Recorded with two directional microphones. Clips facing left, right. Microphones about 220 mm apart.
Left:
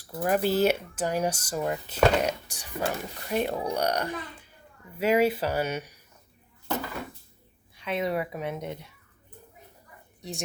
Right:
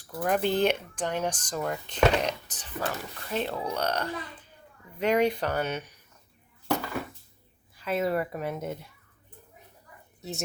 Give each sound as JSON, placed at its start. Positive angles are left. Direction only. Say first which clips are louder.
{"t": 0.1, "sound": "speech", "louder": "left 1 dB", "side_deg": 5}
{"t": 2.9, "sound": "speech", "louder": "left 3 dB", "side_deg": 25}
{"t": 3.2, "sound": "speech", "louder": "left 3 dB", "side_deg": 15}
{"t": 7.8, "sound": "speech", "louder": "right 1 dB", "side_deg": -5}
{"t": 10.2, "sound": "a woman's voice", "louder": "right 1 dB", "side_deg": -5}